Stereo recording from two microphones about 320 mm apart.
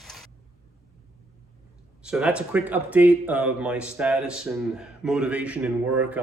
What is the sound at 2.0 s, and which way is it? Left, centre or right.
Speech, centre.